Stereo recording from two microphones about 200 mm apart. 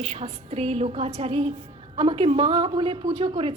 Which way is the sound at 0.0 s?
30° right (ahead or behind).